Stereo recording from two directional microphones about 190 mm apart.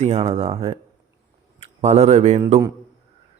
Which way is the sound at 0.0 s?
35° right (ahead or behind).